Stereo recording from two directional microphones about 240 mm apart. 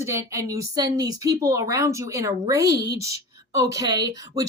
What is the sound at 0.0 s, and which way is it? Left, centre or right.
A woman's voice, centre.